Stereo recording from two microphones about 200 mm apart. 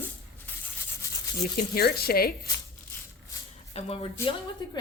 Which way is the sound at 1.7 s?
50° left (ahead or behind).